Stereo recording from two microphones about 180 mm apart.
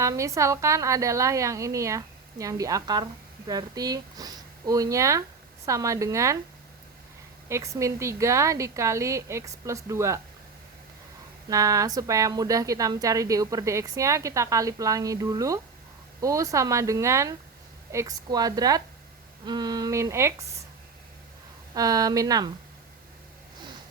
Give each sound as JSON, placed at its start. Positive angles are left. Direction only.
{"t": 0.0, "sound": "a woman's voice", "side_deg": -15}
{"t": 7.4, "sound": "a woman's voice", "side_deg": -15}
{"t": 11.4, "sound": "a woman's voice", "side_deg": -20}
{"t": 21.8, "sound": "speech", "side_deg": -20}